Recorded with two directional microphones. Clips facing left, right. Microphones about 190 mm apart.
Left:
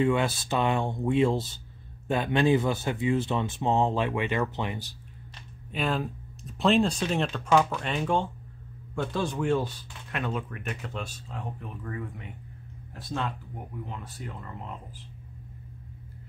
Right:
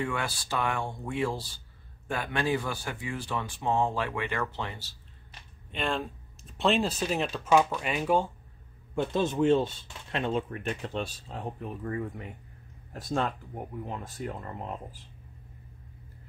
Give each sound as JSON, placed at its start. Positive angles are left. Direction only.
{"t": 0.0, "sound": "speech", "side_deg": 20}
{"t": 5.7, "sound": "speech", "side_deg": 5}
{"t": 8.9, "sound": "speech", "side_deg": -20}